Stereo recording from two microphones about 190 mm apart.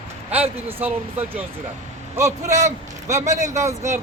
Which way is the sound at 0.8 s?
35° right (ahead or behind).